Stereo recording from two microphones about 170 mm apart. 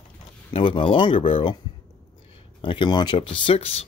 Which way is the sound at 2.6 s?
30° left (ahead or behind).